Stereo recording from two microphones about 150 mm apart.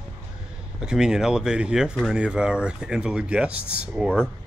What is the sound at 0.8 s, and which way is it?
Speech, 5° right (ahead or behind).